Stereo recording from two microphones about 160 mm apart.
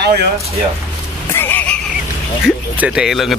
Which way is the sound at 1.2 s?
15° left (ahead or behind).